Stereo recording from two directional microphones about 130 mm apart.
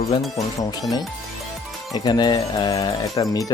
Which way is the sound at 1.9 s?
30° left (ahead or behind).